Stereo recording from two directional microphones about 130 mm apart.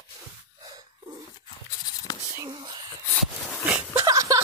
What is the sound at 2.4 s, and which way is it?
Whispering, 35° right (ahead or behind).